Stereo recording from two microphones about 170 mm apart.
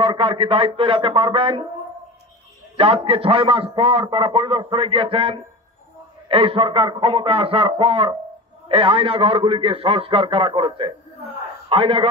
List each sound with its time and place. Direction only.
0.0 s a man's voice: 30° right (ahead or behind)
2.8 s a man's voice: 35° right (ahead or behind)